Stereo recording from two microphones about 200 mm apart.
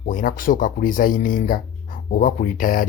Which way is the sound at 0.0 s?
45° left (ahead or behind).